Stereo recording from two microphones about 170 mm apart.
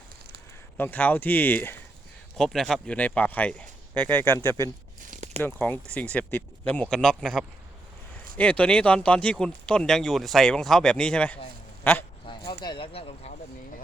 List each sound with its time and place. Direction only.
0.8 s speech: 10° left (ahead or behind)
5.1 s a sound: 45° right (ahead or behind)
5.4 s speech: 10° left (ahead or behind)
12.5 s speech: 30° left (ahead or behind)